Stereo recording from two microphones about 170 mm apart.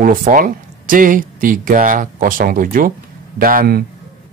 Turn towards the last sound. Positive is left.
turn(degrees=-60)  # may be behind; listen again after turning